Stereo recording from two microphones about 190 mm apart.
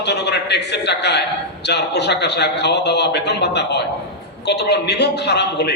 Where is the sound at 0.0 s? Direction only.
60° left (ahead or behind).